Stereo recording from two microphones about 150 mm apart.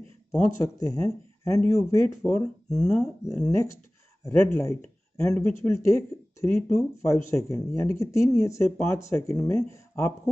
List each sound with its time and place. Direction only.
0.3 s speech: 20° left (ahead or behind)